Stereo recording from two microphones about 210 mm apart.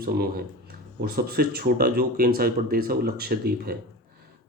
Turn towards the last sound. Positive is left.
turn(degrees=-45)  # may be behind; listen again after turning